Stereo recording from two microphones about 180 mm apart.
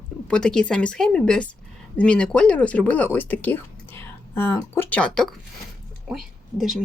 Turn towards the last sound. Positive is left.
turn(degrees=0)  # may be behind; listen again after turning